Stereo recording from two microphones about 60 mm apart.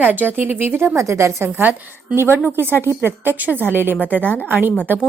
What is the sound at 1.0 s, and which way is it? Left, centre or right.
Speech, right.